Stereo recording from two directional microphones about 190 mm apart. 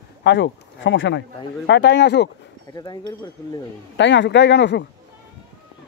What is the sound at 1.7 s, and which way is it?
Speech, 65° left (ahead or behind).